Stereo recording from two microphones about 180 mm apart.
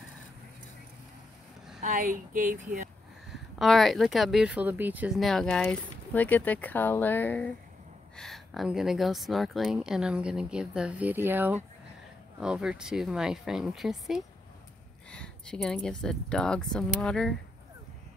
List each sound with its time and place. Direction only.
1.8 s speech: 50° right (ahead or behind)
3.5 s speech: centre (ahead or behind)